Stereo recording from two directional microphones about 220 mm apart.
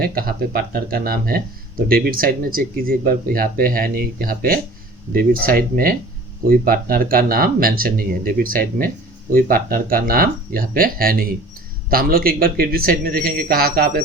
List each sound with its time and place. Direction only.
0.0 s speech: 40° right (ahead or behind)